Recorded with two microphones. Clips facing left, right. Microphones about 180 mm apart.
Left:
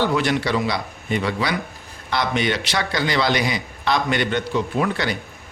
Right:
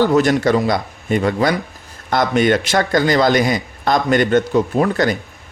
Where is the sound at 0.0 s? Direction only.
45° right (ahead or behind).